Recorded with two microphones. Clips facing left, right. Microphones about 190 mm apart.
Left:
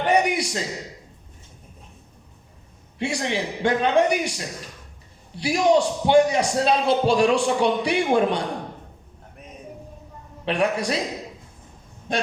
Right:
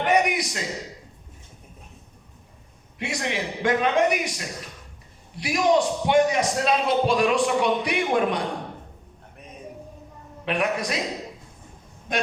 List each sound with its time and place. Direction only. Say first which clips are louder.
0.0 s a sound: left 1 dB; 30° left (ahead or behind)
3.0 s a man's voice: left 3 dB; 30° left (ahead or behind)
10.4 s a man's voice: left 3 dB; 30° left (ahead or behind)
12.1 s a man's voice: left 1 dB; 30° left (ahead or behind)